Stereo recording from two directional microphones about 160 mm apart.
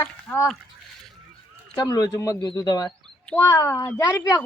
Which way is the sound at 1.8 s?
25° left (ahead or behind).